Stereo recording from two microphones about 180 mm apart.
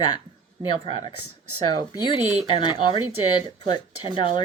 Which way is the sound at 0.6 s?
25° left (ahead or behind).